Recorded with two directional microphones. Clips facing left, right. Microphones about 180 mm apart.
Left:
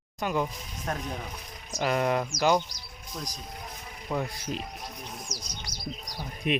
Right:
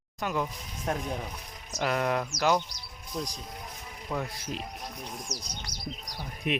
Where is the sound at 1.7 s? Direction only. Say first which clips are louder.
Left 2 dB; 5° left (ahead or behind).